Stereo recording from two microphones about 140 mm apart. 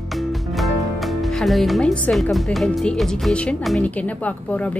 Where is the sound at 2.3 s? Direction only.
Centre (ahead or behind).